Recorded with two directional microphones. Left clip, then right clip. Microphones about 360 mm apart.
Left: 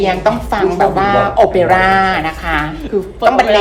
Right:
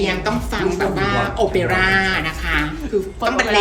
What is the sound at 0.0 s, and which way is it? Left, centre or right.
A woman's voice, centre.